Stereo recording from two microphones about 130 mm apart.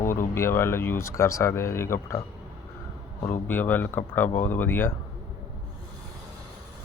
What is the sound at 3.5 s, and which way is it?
Speech, 15° left (ahead or behind).